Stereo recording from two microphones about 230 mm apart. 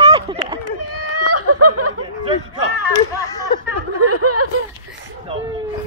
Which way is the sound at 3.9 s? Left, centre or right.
Right.